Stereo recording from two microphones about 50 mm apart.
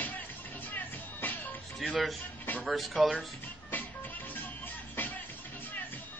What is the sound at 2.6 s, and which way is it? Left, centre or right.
Speech, centre.